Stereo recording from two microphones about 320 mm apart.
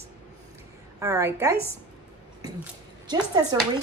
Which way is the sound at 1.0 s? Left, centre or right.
Centre.